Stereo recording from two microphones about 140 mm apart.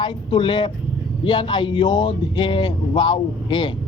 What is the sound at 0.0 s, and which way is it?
A man's voice, 35° left (ahead or behind).